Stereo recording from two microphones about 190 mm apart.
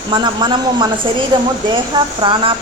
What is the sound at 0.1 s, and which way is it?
A woman's voice, 25° right (ahead or behind).